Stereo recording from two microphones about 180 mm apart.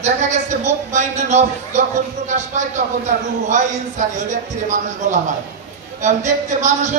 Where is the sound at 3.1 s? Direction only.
55° right (ahead or behind).